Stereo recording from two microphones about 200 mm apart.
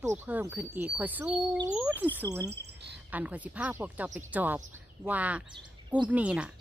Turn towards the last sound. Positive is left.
turn(degrees=-5)  # may be behind; listen again after turning